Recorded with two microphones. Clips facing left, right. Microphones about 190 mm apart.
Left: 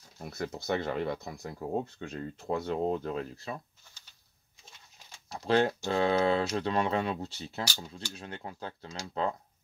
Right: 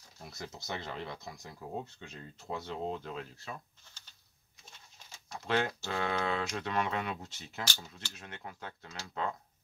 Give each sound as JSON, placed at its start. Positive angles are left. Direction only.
{"t": 0.2, "sound": "speech", "side_deg": 55}
{"t": 5.3, "sound": "speech", "side_deg": 35}